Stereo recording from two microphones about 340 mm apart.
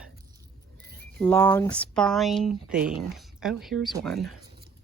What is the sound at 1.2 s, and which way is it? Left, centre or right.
Speech, centre.